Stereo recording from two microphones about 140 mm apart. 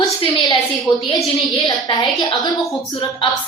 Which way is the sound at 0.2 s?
35° left (ahead or behind).